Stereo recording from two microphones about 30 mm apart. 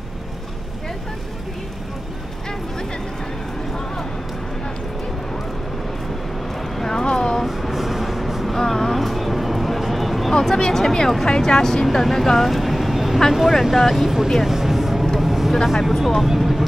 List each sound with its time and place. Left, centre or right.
6.8 s a sound: centre
7.4 s vehicle: centre
8.5 s vehicle: centre
10.4 s a sound: centre
11.2 s speech: left
11.8 s vehicle: centre
13.3 s speech: centre
14.4 s a sound: centre
15.1 s vehicle: centre
15.5 s speech: centre
16.3 s vehicle: centre